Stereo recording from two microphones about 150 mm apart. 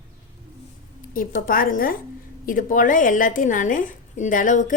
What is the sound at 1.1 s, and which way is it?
A woman's voice, 70° left (ahead or behind).